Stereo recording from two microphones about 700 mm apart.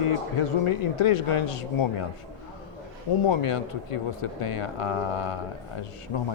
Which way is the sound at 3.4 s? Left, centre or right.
Left.